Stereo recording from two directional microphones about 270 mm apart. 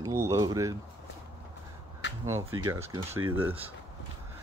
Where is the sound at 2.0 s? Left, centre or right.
Left.